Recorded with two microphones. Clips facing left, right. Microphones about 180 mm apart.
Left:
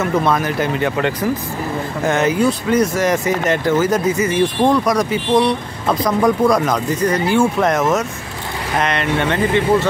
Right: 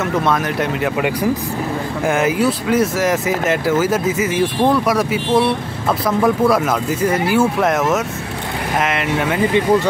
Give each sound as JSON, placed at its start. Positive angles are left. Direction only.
{"t": 0.0, "sound": "speech", "side_deg": 0}